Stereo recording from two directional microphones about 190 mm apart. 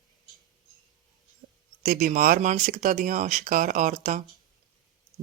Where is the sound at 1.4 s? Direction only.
40° right (ahead or behind).